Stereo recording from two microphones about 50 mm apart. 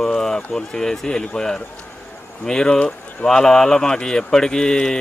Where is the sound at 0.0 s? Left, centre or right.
Centre.